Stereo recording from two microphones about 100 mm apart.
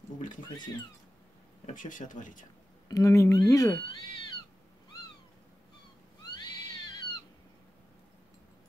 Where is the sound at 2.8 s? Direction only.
35° left (ahead or behind).